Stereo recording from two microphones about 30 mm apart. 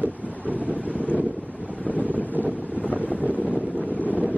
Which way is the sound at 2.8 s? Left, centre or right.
Left.